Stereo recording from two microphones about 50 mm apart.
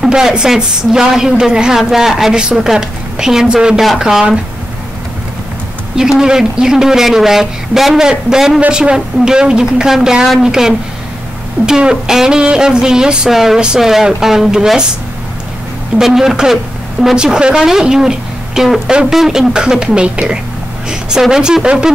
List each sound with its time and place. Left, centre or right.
0.0 s speech: centre
5.9 s speech: centre
13.3 s speech: centre
16.0 s speech: centre